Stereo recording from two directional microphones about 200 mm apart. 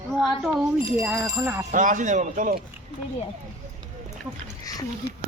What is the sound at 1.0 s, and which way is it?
Speech, 5° right (ahead or behind).